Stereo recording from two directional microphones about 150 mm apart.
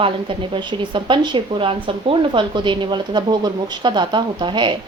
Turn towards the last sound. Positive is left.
turn(degrees=-30)  # may be behind; listen again after turning